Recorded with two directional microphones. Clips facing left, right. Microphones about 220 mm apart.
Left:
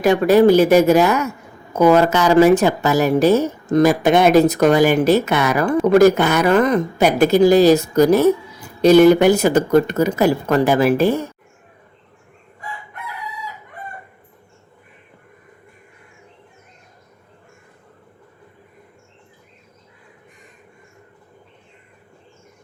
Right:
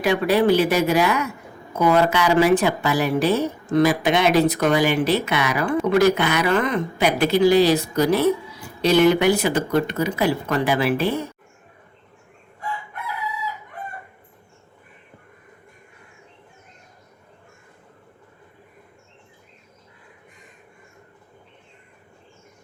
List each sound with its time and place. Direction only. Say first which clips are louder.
0.0 s speech: left 6 dB; 45° left (ahead or behind)